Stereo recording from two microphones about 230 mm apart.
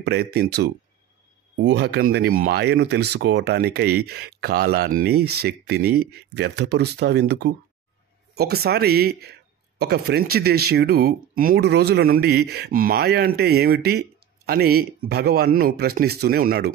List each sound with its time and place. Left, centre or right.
0.0 s speech: right